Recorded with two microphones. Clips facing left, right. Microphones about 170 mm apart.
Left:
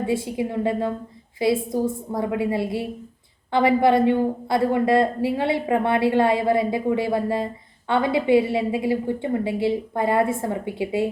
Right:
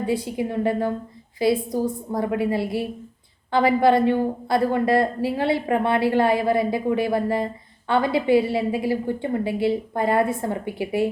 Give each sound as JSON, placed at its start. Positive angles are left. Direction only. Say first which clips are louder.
{"t": 0.0, "sound": "a woman's voice", "louder": "even", "side_deg": 25}